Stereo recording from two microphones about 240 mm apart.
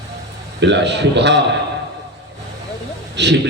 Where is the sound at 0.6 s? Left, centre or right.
Right.